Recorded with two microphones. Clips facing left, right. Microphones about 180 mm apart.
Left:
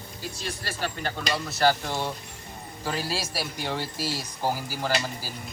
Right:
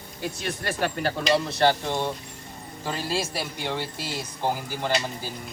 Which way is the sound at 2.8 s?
5° left (ahead or behind).